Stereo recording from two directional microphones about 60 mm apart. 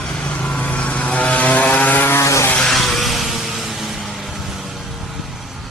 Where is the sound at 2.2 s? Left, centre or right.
Left.